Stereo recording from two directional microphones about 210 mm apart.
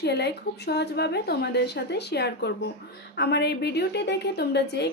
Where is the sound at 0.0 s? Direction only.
55° left (ahead or behind).